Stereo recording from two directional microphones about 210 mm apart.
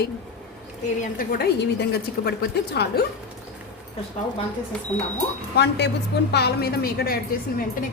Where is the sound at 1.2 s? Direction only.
45° left (ahead or behind).